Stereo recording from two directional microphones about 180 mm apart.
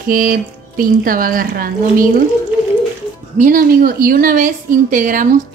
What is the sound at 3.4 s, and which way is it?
A woman's voice, 50° right (ahead or behind).